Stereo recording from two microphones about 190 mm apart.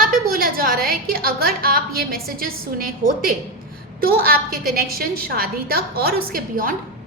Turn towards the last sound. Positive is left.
turn(degrees=-50)  # may be behind; listen again after turning